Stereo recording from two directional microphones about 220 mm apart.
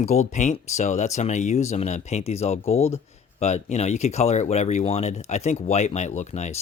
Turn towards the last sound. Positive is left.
turn(degrees=30)  # may be behind; listen again after turning